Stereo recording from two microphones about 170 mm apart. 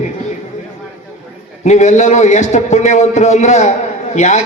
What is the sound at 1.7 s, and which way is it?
A man's voice, 45° left (ahead or behind).